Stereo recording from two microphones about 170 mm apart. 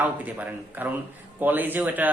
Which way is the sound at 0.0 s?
10° right (ahead or behind).